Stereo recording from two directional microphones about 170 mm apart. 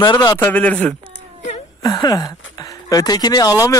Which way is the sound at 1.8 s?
25° left (ahead or behind).